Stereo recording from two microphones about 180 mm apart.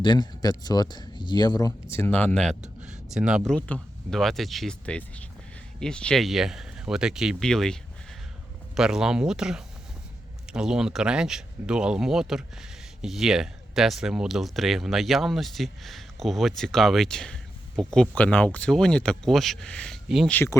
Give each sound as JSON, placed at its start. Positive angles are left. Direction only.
{"t": 0.0, "sound": "speech", "side_deg": 25}
{"t": 20.3, "sound": "speech", "side_deg": 15}